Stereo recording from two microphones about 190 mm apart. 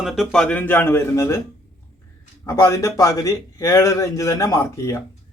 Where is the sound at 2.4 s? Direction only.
15° left (ahead or behind).